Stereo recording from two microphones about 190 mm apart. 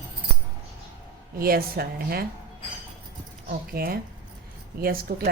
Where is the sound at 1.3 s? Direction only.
50° right (ahead or behind).